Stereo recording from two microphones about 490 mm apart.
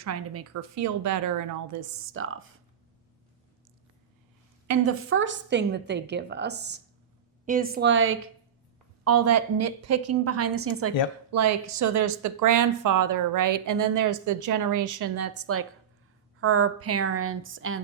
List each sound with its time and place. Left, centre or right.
0.0 s speech: right
4.7 s a woman's voice: right